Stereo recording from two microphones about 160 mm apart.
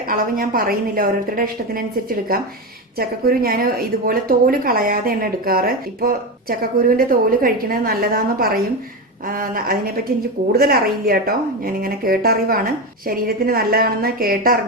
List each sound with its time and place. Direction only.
0.1 s a woman's voice: 65° right (ahead or behind)